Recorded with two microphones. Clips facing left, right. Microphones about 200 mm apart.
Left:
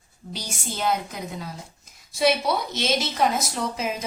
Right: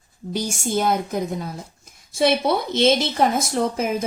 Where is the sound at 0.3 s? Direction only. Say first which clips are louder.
Right 10 dB; 45° right (ahead or behind).